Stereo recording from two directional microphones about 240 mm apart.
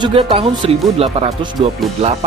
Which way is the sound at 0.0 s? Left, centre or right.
Right.